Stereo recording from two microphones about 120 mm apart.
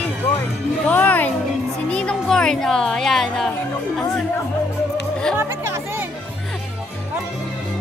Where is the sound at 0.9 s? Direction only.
15° left (ahead or behind).